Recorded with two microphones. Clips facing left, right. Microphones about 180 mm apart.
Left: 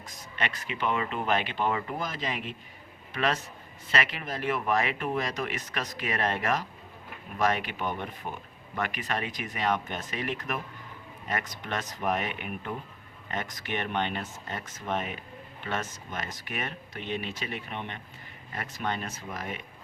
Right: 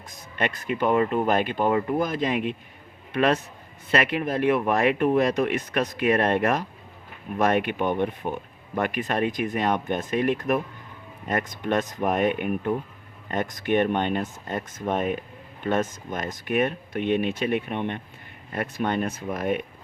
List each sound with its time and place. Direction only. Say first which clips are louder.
0.3 s a man's voice: right 8 dB; 50° right (ahead or behind)